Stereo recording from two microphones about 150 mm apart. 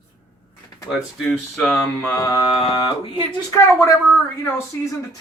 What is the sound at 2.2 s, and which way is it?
Speech, 25° left (ahead or behind).